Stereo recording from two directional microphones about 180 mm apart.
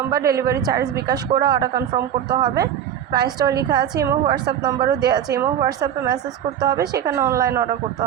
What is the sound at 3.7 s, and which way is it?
A woman's voice, 25° right (ahead or behind).